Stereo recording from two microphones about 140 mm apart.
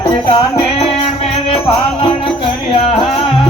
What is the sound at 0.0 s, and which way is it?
Music, 35° left (ahead or behind).